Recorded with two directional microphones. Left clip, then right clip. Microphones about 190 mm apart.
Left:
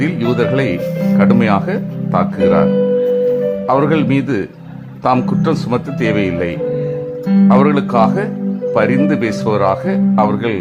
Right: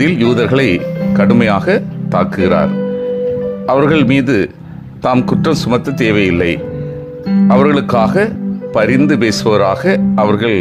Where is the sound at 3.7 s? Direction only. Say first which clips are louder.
Right 5 dB; 20° right (ahead or behind).